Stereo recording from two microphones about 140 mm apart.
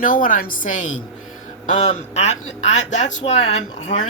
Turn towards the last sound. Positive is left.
turn(degrees=50)  # may be behind; listen again after turning